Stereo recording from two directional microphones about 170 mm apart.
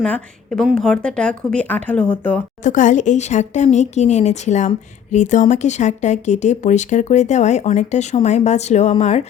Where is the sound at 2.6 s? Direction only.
45° left (ahead or behind).